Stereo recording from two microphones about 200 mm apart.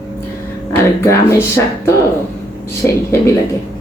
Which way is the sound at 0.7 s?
10° left (ahead or behind).